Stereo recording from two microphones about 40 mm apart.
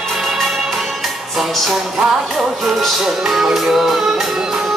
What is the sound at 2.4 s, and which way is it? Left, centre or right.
Music, centre.